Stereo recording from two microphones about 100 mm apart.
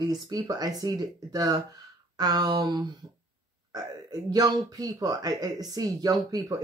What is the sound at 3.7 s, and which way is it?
Speech, 40° right (ahead or behind).